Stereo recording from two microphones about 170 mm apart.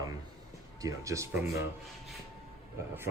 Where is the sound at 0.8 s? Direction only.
20° right (ahead or behind).